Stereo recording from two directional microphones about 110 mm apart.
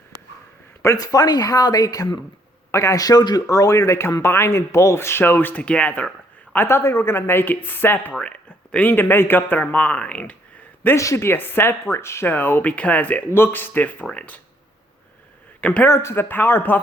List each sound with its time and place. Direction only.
0.8 s speech: 30° left (ahead or behind); by 10.3 s 10° left (ahead or behind)
10.8 s speech: 25° left (ahead or behind)
15.6 s speech: 10° left (ahead or behind)
15.9 s speech: 25° left (ahead or behind)